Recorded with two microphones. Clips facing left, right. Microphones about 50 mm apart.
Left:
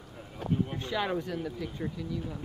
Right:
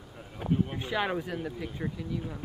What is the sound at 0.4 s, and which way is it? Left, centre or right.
Speech, centre.